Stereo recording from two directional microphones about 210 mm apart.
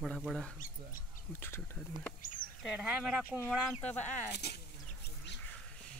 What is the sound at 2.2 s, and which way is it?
Speech, 40° left (ahead or behind).